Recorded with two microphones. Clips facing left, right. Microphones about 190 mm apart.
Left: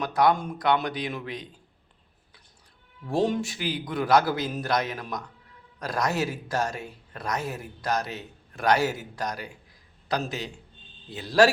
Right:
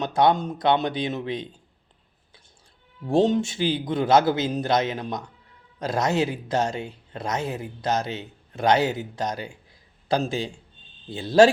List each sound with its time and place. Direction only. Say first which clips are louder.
0.0 s a man's voice: right 2 dB; 25° right (ahead or behind)
3.1 s a man's voice: right 5 dB; 25° right (ahead or behind)